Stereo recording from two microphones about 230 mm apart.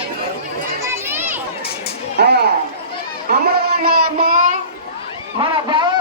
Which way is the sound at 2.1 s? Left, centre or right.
Right.